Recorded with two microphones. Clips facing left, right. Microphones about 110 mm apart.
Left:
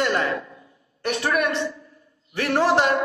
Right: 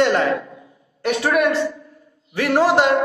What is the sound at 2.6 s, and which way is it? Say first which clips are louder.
Speech: right 3 dB; 15° right (ahead or behind).